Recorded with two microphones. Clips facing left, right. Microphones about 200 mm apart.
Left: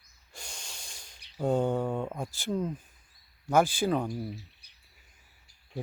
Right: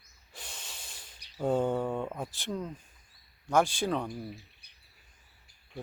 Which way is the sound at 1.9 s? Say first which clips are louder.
Left 1 dB; 10° left (ahead or behind).